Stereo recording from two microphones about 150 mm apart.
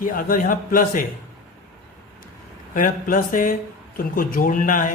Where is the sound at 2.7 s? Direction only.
70° left (ahead or behind).